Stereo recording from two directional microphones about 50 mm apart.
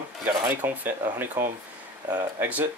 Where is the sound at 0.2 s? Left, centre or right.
Right.